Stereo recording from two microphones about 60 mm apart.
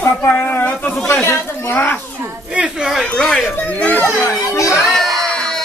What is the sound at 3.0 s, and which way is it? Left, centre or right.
Speech, centre.